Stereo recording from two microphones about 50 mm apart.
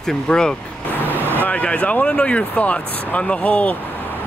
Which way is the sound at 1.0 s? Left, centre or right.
Right.